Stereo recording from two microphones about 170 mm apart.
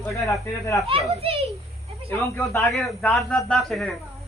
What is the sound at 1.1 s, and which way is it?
Speech, 35° right (ahead or behind).